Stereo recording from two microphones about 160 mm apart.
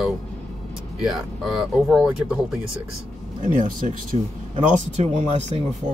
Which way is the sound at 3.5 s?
55° right (ahead or behind).